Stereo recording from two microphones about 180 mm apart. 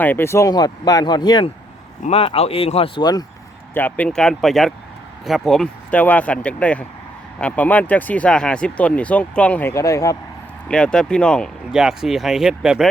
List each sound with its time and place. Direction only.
0.0 s speech: 10° left (ahead or behind)
3.8 s speech: 10° left (ahead or behind)
10.7 s speech: 5° left (ahead or behind)